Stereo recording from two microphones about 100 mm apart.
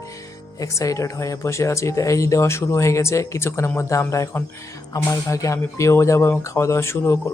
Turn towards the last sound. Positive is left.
turn(degrees=25)  # may be behind; listen again after turning